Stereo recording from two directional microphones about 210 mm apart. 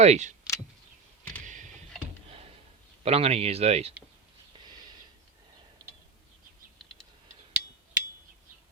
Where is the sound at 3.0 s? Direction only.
30° right (ahead or behind).